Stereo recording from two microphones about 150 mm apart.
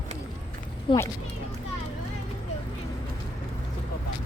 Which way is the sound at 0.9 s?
35° left (ahead or behind).